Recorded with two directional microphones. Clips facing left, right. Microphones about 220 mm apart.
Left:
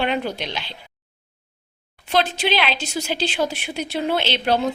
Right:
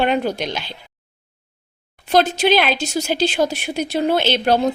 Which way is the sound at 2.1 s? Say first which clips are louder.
Right 5 dB; 45° right (ahead or behind).